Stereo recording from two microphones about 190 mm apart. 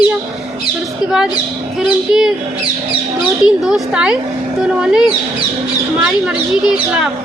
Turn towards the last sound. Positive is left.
turn(degrees=-5)  # may be behind; listen again after turning